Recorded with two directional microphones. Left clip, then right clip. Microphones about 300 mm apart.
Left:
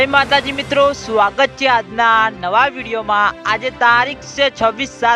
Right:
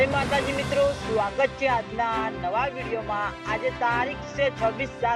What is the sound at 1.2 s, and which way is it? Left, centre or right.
Speech, left.